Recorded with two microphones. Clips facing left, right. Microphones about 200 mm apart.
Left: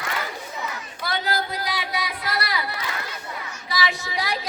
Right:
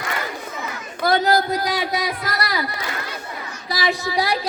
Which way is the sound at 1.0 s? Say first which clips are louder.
Right 9 dB; 45° right (ahead or behind).